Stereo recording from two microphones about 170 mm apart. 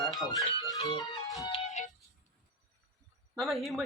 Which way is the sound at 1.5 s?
40° left (ahead or behind).